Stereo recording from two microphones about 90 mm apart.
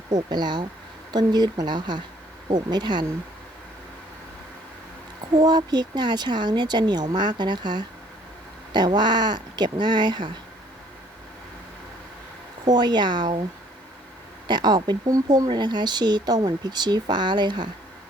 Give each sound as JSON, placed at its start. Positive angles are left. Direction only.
{"t": 0.1, "sound": "speech", "side_deg": -50}
{"t": 5.4, "sound": "speech", "side_deg": -50}
{"t": 12.6, "sound": "speech", "side_deg": -55}
{"t": 14.4, "sound": "speech", "side_deg": -55}
{"t": 15.0, "sound": "speech", "side_deg": -40}
{"t": 15.4, "sound": "speech", "side_deg": -60}